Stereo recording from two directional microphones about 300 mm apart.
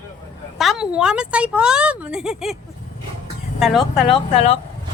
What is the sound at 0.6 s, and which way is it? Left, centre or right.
A woman's voice, centre.